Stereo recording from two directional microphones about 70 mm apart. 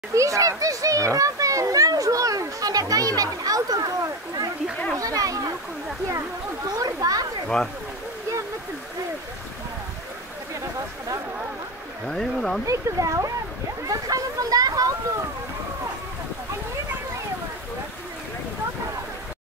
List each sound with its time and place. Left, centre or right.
0.1 s a child's voice: right
6.8 s a child's voice: right
7.4 s speech: centre
12.1 s speech: centre
12.6 s a child's voice: right